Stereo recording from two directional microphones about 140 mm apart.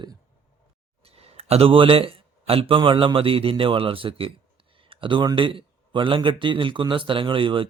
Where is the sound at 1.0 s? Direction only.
45° right (ahead or behind).